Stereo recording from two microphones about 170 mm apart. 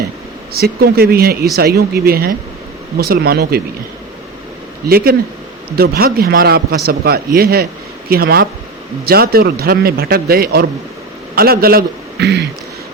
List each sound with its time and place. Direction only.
0.5 s a man's voice: 65° right (ahead or behind)
4.9 s a man's voice: 60° right (ahead or behind); by 12.5 s 80° right